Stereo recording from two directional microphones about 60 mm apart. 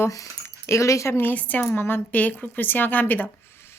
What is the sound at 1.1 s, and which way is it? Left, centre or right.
A woman's voice, left.